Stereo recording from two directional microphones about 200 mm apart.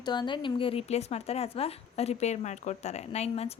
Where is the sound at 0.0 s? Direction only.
20° left (ahead or behind).